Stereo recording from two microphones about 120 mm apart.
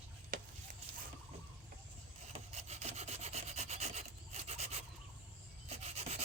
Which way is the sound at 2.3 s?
70° right (ahead or behind).